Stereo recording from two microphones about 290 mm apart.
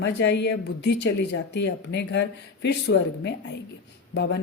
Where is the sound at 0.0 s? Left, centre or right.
Left.